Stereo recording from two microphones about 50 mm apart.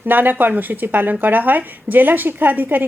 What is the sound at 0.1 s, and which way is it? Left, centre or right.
Speech, right.